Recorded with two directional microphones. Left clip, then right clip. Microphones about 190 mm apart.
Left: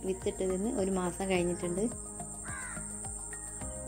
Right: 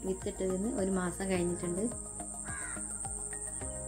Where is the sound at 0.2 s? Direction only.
10° left (ahead or behind).